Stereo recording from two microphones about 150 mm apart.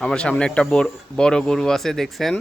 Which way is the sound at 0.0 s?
5° left (ahead or behind).